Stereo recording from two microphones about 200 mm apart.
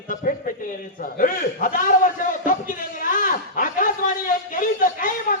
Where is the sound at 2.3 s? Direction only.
40° left (ahead or behind).